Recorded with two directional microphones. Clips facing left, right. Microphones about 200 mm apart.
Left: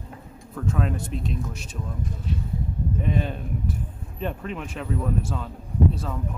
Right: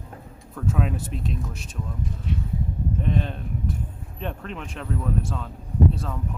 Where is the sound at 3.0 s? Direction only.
5° left (ahead or behind).